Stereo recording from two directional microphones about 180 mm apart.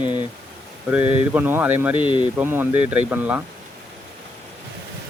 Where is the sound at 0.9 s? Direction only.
10° right (ahead or behind).